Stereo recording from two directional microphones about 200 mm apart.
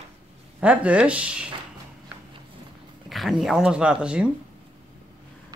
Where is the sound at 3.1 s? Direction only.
Centre (ahead or behind).